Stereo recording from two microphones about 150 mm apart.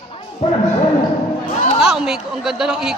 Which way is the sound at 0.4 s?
45° left (ahead or behind).